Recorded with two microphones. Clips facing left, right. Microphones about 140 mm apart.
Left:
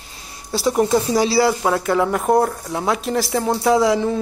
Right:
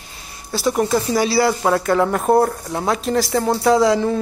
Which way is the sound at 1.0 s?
15° left (ahead or behind).